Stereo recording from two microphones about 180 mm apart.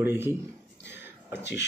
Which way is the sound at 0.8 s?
75° left (ahead or behind).